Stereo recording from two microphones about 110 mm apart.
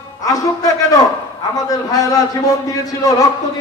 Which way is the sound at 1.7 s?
35° left (ahead or behind).